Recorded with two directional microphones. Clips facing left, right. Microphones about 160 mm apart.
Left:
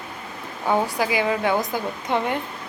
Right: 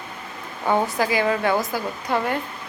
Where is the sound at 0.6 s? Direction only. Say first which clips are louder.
Right 1 dB; 10° left (ahead or behind).